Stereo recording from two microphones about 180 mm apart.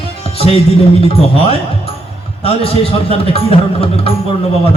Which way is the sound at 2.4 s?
30° left (ahead or behind).